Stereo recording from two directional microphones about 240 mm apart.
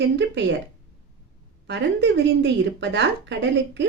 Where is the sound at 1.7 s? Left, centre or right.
Right.